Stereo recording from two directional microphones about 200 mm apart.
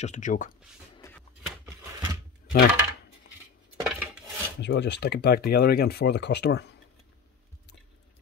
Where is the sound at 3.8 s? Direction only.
5° right (ahead or behind).